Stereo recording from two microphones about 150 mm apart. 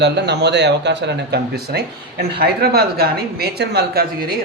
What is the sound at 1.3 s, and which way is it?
Speech, 90° right.